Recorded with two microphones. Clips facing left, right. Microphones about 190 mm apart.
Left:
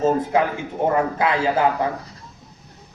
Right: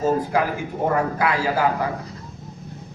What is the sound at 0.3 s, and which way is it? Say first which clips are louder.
A man's voice: left 2 dB; 20° left (ahead or behind).